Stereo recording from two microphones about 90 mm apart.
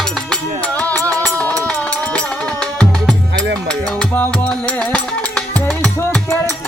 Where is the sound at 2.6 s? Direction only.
10° left (ahead or behind).